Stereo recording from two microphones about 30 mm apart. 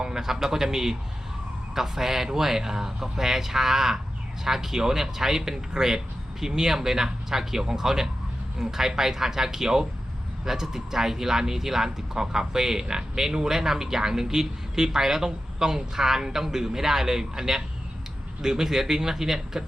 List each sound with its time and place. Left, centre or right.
0.0 s speech: centre